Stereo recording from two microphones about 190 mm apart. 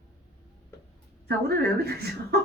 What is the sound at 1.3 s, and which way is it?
Speech, 55° right (ahead or behind).